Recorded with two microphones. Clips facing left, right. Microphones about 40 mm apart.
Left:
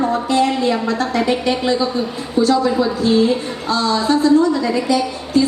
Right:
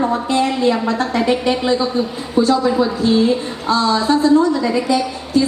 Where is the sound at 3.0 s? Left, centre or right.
Right.